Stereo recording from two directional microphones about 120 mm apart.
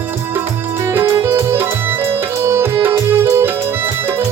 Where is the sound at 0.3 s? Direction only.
20° right (ahead or behind).